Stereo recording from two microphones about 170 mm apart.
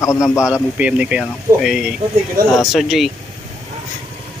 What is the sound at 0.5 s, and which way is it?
Speech, 5° right (ahead or behind).